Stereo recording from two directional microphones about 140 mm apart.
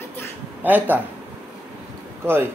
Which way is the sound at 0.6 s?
15° right (ahead or behind).